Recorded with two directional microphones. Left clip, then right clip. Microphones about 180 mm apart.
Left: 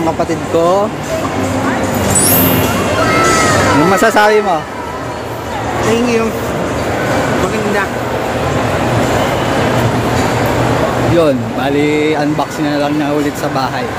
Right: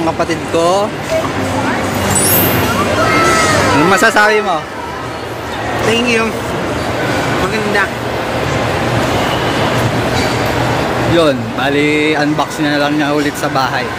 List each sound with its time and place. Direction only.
0.2 s speech: 20° left (ahead or behind)
3.7 s speech: centre (ahead or behind)
4.0 s speech: 15° left (ahead or behind)
5.9 s speech: 10° left (ahead or behind)
11.1 s speech: 5° left (ahead or behind)